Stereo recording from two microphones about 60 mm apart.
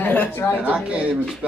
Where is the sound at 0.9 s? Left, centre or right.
Centre.